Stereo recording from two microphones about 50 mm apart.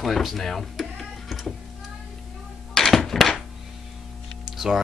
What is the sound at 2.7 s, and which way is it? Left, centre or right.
Thunk, centre.